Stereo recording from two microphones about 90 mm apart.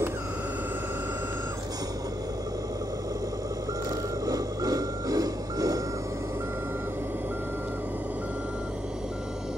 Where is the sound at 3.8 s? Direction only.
40° right (ahead or behind).